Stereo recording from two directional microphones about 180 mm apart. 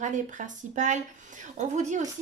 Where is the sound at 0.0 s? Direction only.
45° right (ahead or behind).